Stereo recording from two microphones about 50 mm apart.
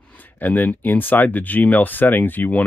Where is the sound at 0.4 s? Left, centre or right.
Left.